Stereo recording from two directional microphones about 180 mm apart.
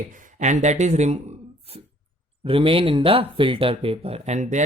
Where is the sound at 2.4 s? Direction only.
30° right (ahead or behind).